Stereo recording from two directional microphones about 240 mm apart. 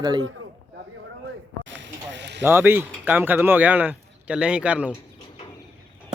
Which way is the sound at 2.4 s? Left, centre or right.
Centre.